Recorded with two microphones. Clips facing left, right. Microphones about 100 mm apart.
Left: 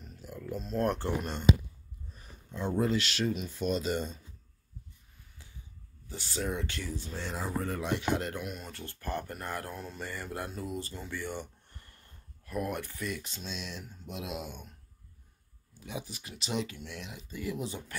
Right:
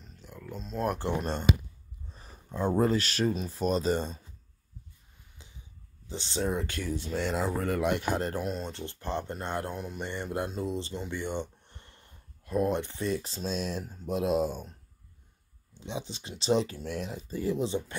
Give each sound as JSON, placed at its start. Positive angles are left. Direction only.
{"t": 0.0, "sound": "a sound", "side_deg": 5}
{"t": 2.0, "sound": "a sound", "side_deg": -35}
{"t": 2.8, "sound": "speech", "side_deg": -40}
{"t": 5.4, "sound": "a sound", "side_deg": -20}
{"t": 6.0, "sound": "speech", "side_deg": -25}
{"t": 6.5, "sound": "speech", "side_deg": -45}
{"t": 6.9, "sound": "speech", "side_deg": -70}
{"t": 8.0, "sound": "speech", "side_deg": -40}
{"t": 15.7, "sound": "speech", "side_deg": -25}